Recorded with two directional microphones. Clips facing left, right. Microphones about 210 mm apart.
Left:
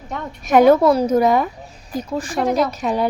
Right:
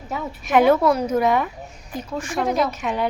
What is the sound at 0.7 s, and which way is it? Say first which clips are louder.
Speech: left 4 dB; 35° left (ahead or behind).